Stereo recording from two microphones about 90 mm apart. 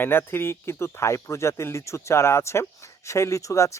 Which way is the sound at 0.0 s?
25° left (ahead or behind).